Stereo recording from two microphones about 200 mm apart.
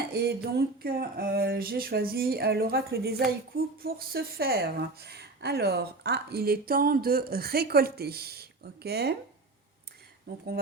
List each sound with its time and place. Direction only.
0.1 s a woman's voice: 55° right (ahead or behind)
10.3 s speech: 60° right (ahead or behind)